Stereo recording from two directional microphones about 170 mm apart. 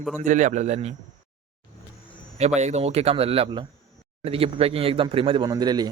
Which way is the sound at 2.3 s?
40° right (ahead or behind).